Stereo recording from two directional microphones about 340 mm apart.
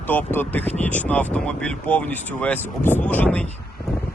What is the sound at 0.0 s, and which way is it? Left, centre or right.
Speech, centre.